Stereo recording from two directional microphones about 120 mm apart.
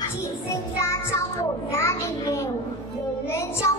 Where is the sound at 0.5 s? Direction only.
25° left (ahead or behind).